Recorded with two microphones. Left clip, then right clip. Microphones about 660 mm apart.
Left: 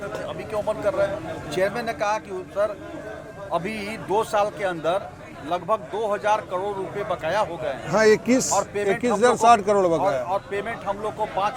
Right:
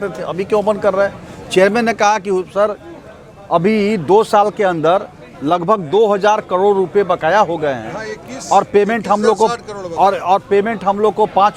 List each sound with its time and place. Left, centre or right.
0.3 s a man's voice: right
7.9 s speech: left
8.5 s a man's voice: right
9.3 s speech: left
10.0 s a man's voice: right